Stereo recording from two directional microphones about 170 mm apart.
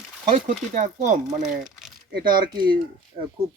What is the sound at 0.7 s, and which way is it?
Speech, 50° right (ahead or behind).